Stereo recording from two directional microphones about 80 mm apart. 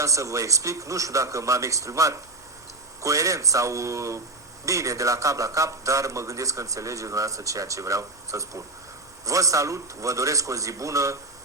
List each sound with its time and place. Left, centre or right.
0.0 s a man's voice: right